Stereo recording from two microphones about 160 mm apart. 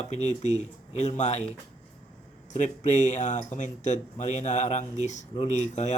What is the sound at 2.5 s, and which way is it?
Speech, 50° left (ahead or behind).